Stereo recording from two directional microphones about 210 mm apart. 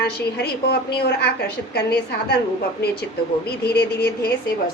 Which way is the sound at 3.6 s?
50° left (ahead or behind).